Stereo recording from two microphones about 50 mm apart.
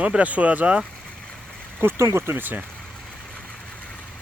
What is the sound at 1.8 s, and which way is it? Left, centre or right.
Speech, right.